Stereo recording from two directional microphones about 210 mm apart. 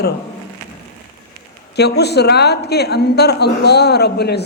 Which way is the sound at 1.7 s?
50° left (ahead or behind).